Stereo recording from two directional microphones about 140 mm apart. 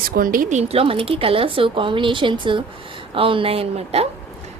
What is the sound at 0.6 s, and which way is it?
A woman's voice, 45° right (ahead or behind).